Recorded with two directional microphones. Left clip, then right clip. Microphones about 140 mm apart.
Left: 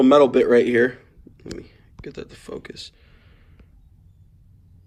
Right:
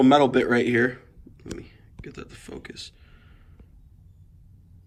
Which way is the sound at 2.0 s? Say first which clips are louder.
Left 5 dB; 5° left (ahead or behind).